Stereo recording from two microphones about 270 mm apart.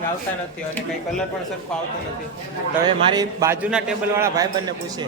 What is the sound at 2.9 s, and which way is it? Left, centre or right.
A man's voice, centre.